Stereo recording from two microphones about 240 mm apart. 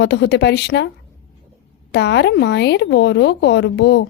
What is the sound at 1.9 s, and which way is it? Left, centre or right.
Speech, left.